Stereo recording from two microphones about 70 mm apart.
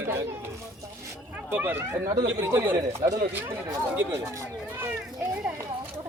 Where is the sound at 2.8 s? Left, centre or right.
Right.